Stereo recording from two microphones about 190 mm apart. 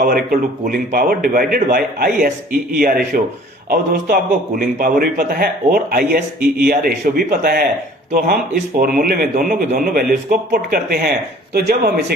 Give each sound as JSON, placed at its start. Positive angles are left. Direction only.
{"t": 0.0, "sound": "a man's voice", "side_deg": -50}
{"t": 8.7, "sound": "a man's voice", "side_deg": -50}